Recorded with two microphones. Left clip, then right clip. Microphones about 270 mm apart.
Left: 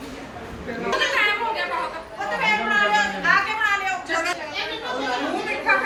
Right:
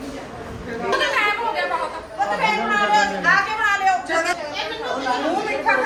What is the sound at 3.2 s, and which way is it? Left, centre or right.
Chatter, right.